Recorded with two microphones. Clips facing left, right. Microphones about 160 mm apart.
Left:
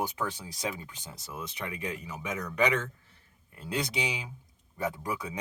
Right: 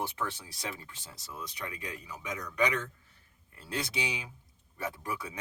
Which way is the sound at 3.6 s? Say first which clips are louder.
Left 3 dB; 20° left (ahead or behind).